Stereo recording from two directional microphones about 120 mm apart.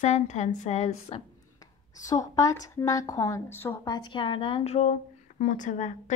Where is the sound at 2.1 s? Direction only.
25° left (ahead or behind).